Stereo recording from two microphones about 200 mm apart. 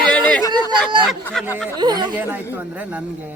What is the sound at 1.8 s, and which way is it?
Speech, 20° right (ahead or behind).